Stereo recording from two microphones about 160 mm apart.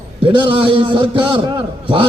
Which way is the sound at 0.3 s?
35° right (ahead or behind).